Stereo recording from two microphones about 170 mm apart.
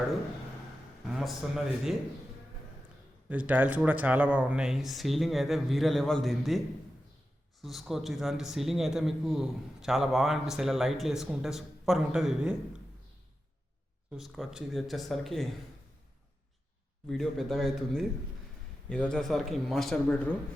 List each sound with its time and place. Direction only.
1.1 s a man's voice: centre (ahead or behind)
3.2 s a man's voice: 10° right (ahead or behind)
7.6 s a man's voice: centre (ahead or behind)
14.1 s a man's voice: centre (ahead or behind)
17.1 s a man's voice: centre (ahead or behind)